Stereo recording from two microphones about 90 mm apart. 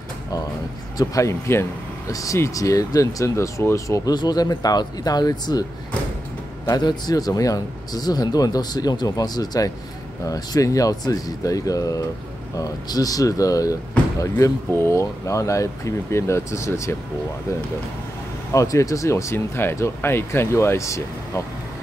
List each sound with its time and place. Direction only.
0.9 s speech: 40° left (ahead or behind)
6.7 s speech: 50° left (ahead or behind); by 16.9 s 30° left (ahead or behind)
18.5 s speech: 35° left (ahead or behind)